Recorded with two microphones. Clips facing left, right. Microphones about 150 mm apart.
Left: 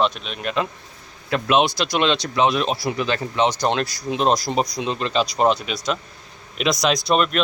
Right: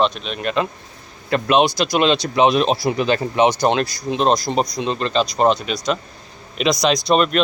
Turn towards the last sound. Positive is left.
turn(degrees=0)  # may be behind; listen again after turning